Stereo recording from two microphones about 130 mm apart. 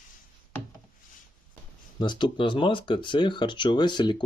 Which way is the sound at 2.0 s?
35° left (ahead or behind).